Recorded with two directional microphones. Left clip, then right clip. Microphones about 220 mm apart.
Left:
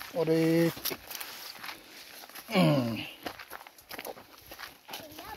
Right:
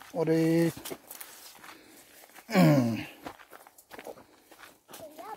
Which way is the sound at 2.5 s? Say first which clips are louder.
Right 2 dB; 45° right (ahead or behind).